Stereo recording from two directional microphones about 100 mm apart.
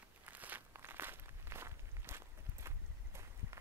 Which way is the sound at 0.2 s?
15° right (ahead or behind).